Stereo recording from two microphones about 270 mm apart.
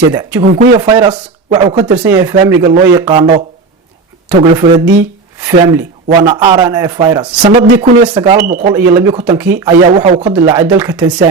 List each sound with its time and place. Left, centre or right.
0.1 s a man's voice: centre
8.4 s speech: right
8.7 s a man's voice: centre
9.5 s a man's voice: centre
9.9 s a man's voice: right
10.4 s a man's voice: centre